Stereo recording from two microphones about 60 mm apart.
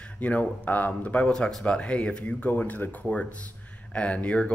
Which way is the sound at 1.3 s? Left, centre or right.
Centre.